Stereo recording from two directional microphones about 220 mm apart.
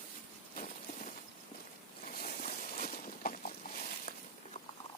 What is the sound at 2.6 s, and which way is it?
Walk, 40° left (ahead or behind).